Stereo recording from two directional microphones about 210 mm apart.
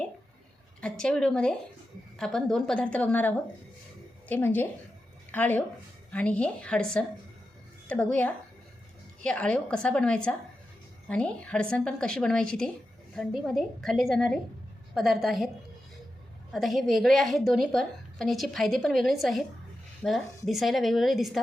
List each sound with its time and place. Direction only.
0.8 s a woman's voice: 5° left (ahead or behind)
16.5 s a woman's voice: centre (ahead or behind)